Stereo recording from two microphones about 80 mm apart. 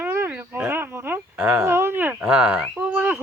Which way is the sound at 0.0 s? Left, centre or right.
Right.